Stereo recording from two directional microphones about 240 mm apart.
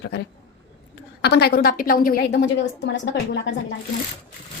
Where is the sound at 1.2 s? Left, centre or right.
Left.